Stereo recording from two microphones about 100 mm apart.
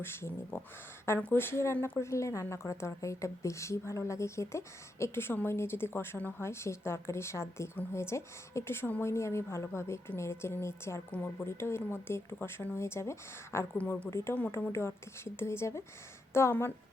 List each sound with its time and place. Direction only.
0.0 s a woman's voice: 25° left (ahead or behind)
13.7 s a woman's voice: 15° left (ahead or behind)
14.3 s a woman's voice: 15° left (ahead or behind)